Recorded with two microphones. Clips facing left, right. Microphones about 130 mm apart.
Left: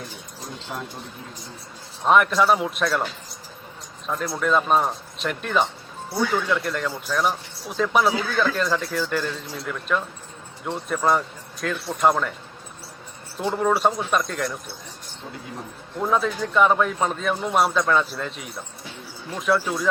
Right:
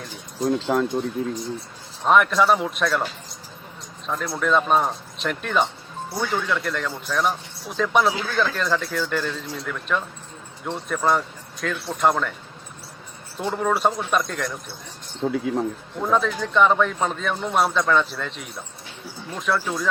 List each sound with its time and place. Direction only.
0.4 s speech: 90° right
2.0 s speech: centre (ahead or behind)
4.0 s speech: centre (ahead or behind)
13.3 s speech: centre (ahead or behind)
15.2 s speech: 90° right
16.0 s speech: centre (ahead or behind)